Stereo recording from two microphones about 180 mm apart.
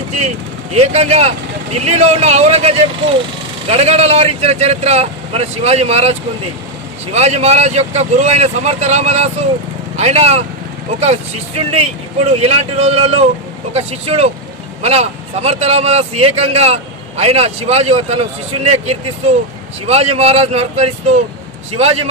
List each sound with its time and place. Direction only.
0.7 s speech: 35° right (ahead or behind)